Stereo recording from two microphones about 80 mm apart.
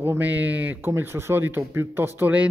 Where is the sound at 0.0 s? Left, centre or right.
Right.